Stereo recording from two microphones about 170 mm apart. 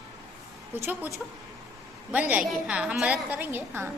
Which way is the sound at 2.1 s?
10° right (ahead or behind).